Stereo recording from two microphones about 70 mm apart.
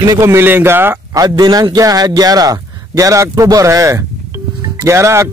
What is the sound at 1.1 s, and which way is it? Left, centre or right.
A man's voice, right.